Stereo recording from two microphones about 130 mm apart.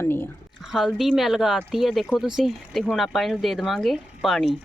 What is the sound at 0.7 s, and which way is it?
Speech, centre (ahead or behind).